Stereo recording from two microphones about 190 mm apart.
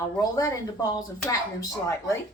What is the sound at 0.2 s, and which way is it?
Speech, 20° left (ahead or behind).